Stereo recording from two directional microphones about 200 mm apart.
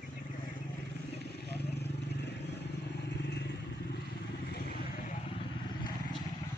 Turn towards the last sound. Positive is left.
turn(degrees=50)  # may be behind; listen again after turning